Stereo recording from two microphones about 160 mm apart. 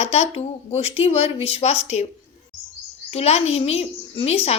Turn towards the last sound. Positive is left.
turn(degrees=40)  # may be behind; listen again after turning